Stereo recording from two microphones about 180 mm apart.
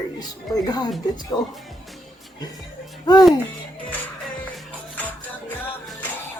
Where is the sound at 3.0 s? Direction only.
20° left (ahead or behind).